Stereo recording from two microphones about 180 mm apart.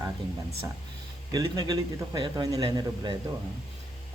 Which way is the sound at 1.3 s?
20° right (ahead or behind).